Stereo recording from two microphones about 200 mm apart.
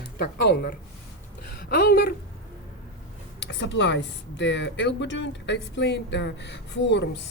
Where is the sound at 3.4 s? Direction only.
65° left (ahead or behind).